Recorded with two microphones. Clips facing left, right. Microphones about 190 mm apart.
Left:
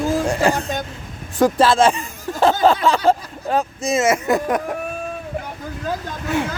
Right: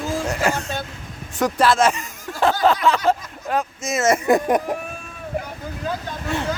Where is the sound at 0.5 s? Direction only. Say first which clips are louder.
Left 3 dB; 15° left (ahead or behind).